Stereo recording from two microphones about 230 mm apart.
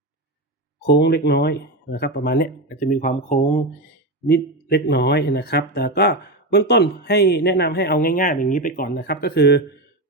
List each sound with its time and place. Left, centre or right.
0.9 s speech: left
4.3 s speech: left